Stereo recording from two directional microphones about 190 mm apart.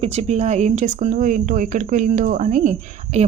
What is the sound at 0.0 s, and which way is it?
Speech, 35° right (ahead or behind).